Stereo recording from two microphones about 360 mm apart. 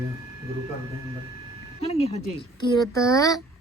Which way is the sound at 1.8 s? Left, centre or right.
Centre.